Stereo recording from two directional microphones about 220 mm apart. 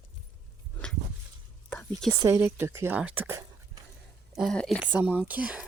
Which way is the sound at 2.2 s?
10° right (ahead or behind).